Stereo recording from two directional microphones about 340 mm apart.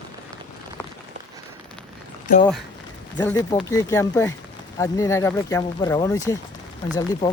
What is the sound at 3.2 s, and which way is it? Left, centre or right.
Speech, centre.